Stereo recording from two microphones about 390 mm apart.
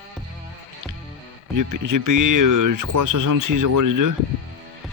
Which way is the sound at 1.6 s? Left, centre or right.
Right.